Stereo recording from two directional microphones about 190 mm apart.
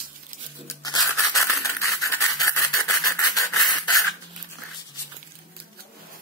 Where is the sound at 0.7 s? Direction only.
20° left (ahead or behind).